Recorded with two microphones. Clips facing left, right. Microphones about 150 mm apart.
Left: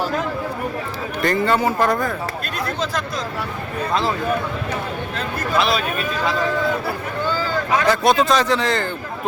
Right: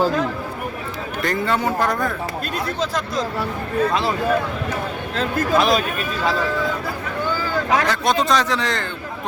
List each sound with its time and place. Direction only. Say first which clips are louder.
1.2 s speech: left 3 dB; centre (ahead or behind)
5.5 s speech: right 2 dB; 45° right (ahead or behind)
7.9 s speech: left 3 dB; 5° left (ahead or behind)